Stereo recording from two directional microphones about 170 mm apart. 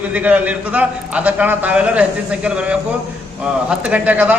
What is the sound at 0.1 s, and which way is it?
A man's voice, 10° right (ahead or behind).